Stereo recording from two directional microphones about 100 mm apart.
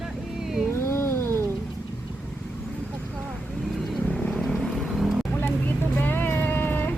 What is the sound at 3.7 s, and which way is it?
Vehicle, centre (ahead or behind).